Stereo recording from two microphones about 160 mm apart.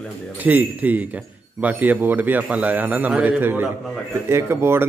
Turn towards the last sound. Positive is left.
turn(degrees=-15)  # may be behind; listen again after turning